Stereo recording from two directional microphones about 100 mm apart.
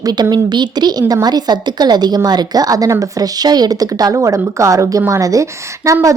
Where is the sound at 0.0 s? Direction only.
40° right (ahead or behind).